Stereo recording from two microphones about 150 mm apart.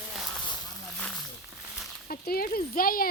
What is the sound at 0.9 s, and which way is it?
Snake, 5° left (ahead or behind).